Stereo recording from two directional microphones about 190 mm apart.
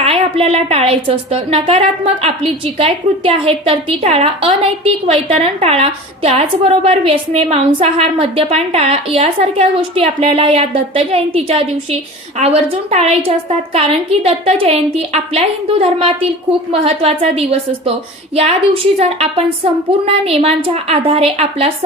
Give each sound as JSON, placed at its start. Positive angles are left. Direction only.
{"t": 0.0, "sound": "a woman's voice", "side_deg": -30}